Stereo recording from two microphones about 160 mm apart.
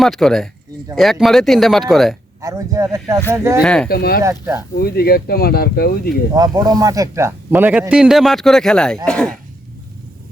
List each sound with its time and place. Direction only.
0.0 s speech: centre (ahead or behind)
2.4 s a man's voice: 20° right (ahead or behind)
3.6 s speech: 5° left (ahead or behind)
3.8 s speech: 70° left (ahead or behind)
4.2 s a man's voice: 15° right (ahead or behind)
4.8 s speech: 75° left (ahead or behind)
6.3 s a man's voice: 25° right (ahead or behind); by 9.3 s 5° left (ahead or behind)